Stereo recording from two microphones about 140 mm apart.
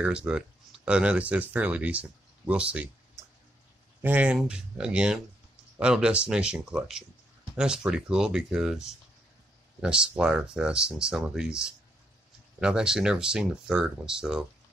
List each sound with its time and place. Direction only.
0.0 s speech: 5° right (ahead or behind)
4.0 s speech: 10° right (ahead or behind)